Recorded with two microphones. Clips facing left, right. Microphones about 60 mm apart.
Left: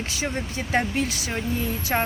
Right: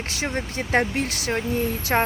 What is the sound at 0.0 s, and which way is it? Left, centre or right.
Speech, right.